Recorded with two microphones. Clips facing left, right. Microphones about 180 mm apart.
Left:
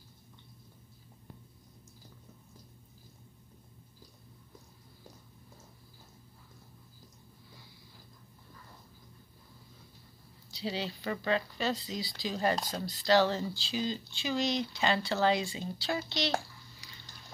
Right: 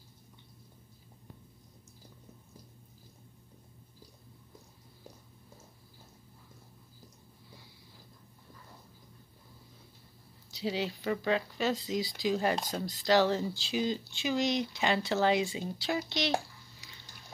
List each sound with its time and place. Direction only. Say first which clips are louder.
10.6 s speech: right 3 dB; 15° right (ahead or behind)